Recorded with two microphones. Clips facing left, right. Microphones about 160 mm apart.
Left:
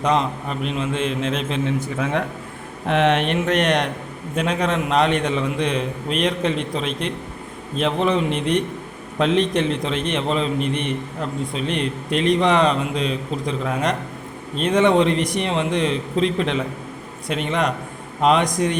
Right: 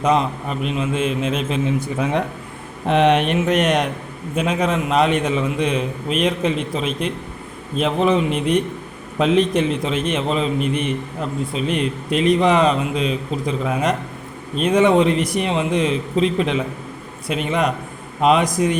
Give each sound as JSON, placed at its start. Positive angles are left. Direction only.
{"t": 0.0, "sound": "a man's voice", "side_deg": -5}